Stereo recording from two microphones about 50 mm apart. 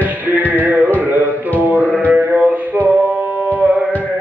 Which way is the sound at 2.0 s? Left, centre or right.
Right.